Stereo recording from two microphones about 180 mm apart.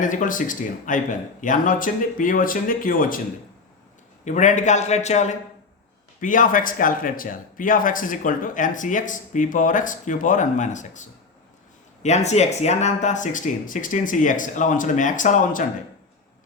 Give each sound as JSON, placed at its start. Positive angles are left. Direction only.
{"t": 0.0, "sound": "a man's voice", "side_deg": 45}
{"t": 4.3, "sound": "a man's voice", "side_deg": 40}